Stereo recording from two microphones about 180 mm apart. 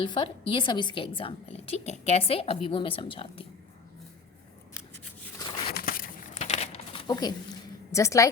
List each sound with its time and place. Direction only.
0.0 s a woman's voice: 25° left (ahead or behind)
5.7 s a sound: 50° left (ahead or behind)
7.1 s a woman's voice: 25° left (ahead or behind)